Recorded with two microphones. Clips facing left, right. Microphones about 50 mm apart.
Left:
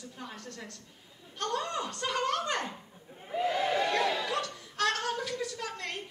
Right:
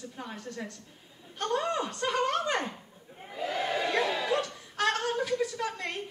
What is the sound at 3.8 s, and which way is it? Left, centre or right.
Chuckle, centre.